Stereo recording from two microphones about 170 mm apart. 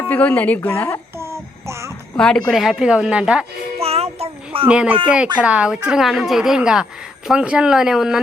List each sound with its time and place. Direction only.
0.1 s a woman's voice: 10° left (ahead or behind)
1.2 s child singing: 15° right (ahead or behind)
2.1 s a woman's voice: 5° left (ahead or behind)
3.8 s music: 35° right (ahead or behind)
4.7 s a woman's voice: 5° right (ahead or behind)